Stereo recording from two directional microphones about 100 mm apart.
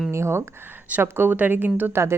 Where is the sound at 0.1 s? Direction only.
25° right (ahead or behind).